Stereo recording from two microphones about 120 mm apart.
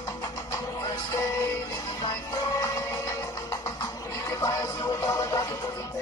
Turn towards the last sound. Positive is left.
turn(degrees=30)  # may be behind; listen again after turning